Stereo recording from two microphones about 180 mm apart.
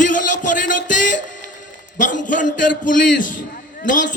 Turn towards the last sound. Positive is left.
turn(degrees=45)  # may be behind; listen again after turning